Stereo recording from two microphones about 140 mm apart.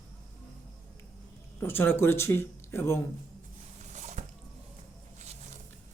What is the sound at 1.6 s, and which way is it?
Speech, 15° left (ahead or behind).